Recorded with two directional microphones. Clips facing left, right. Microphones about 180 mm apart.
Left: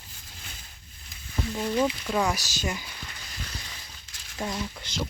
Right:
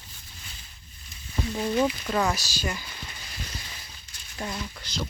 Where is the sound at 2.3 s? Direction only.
20° left (ahead or behind).